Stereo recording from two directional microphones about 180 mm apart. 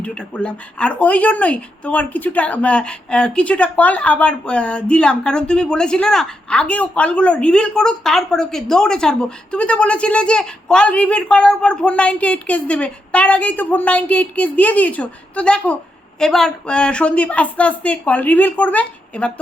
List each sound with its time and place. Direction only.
0.0 s speech: 5° left (ahead or behind)